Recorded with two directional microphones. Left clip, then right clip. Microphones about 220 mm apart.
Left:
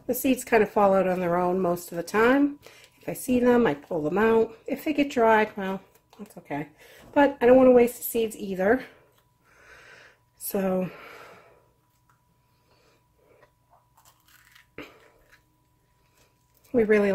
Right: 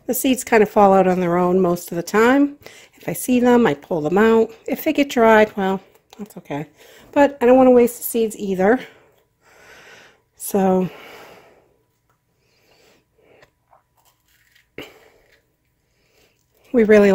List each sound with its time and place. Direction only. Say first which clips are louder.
0.0 s a woman's voice: right 5 dB; 45° right (ahead or behind)
9.5 s a sound: right 6 dB; 40° right (ahead or behind)
16.7 s a woman's voice: right 9 dB; 45° right (ahead or behind)